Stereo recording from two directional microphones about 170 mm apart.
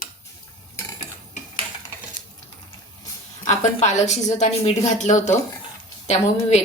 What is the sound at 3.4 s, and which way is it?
A woman's voice, 40° left (ahead or behind).